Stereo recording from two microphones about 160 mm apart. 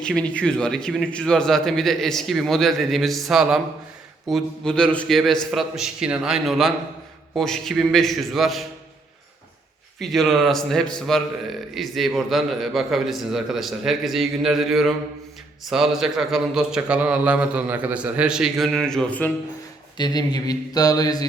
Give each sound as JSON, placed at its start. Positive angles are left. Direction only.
{"t": 0.0, "sound": "a man's voice", "side_deg": 5}
{"t": 10.0, "sound": "a man's voice", "side_deg": 0}
{"t": 20.0, "sound": "speech", "side_deg": 25}